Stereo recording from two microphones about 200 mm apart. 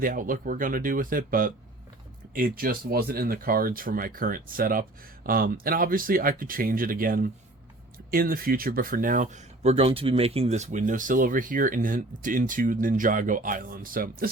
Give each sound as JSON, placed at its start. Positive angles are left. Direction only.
{"t": 0.0, "sound": "speech", "side_deg": -45}